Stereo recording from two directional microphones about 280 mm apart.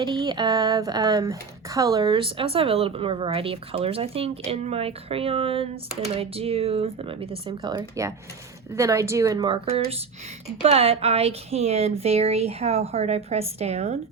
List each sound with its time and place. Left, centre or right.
0.0 s a woman's voice: centre